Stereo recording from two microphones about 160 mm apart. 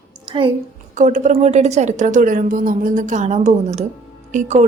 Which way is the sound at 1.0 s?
50° right (ahead or behind).